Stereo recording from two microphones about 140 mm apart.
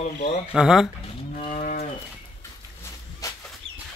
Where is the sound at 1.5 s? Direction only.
55° left (ahead or behind).